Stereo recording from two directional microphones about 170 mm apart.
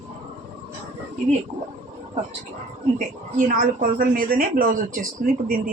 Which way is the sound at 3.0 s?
50° right (ahead or behind).